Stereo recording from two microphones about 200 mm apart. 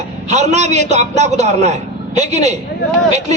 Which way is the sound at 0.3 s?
35° right (ahead or behind).